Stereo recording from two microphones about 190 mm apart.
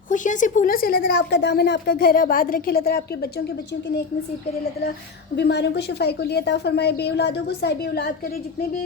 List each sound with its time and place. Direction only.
0.1 s a woman's voice: 40° left (ahead or behind)
5.4 s a woman's voice: 65° left (ahead or behind)